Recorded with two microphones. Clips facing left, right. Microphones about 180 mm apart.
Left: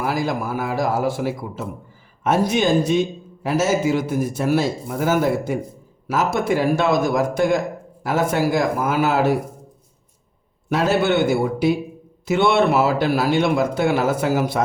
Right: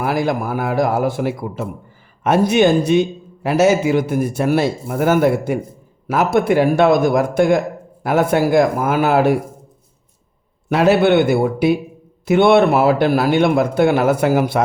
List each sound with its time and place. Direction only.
0.0 s a man's voice: 60° right (ahead or behind)
10.7 s a man's voice: 65° right (ahead or behind)